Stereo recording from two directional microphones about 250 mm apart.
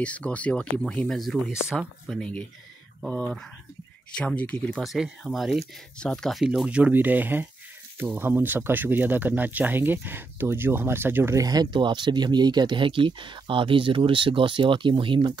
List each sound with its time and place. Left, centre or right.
0.0 s speech: centre